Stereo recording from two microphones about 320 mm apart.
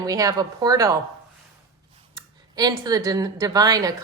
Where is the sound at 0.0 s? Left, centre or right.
Centre.